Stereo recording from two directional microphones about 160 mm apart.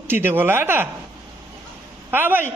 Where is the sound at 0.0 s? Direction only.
15° right (ahead or behind).